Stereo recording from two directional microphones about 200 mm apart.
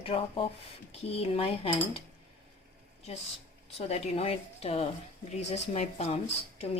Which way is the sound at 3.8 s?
30° left (ahead or behind).